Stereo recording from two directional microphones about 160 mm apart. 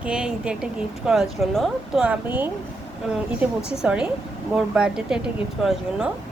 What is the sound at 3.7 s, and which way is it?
Speech, 5° right (ahead or behind).